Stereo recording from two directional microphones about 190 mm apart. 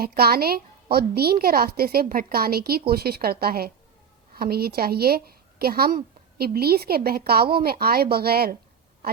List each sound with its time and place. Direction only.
0.0 s a woman's voice: 55° right (ahead or behind)